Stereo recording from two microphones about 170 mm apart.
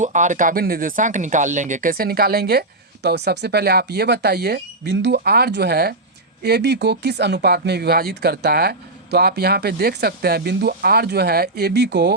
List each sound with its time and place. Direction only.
0.0 s speech: 45° right (ahead or behind); by 12.1 s 85° right